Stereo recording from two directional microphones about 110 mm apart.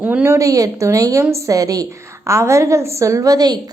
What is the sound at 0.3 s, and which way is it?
A woman's voice, 30° right (ahead or behind).